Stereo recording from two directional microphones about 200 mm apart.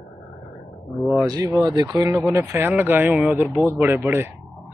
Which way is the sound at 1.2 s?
20° right (ahead or behind).